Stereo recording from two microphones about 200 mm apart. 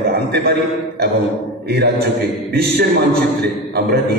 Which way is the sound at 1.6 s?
55° right (ahead or behind).